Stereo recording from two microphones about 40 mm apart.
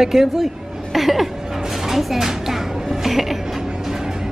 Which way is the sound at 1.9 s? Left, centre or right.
Centre.